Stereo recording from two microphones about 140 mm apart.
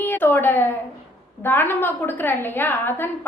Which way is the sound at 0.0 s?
15° left (ahead or behind).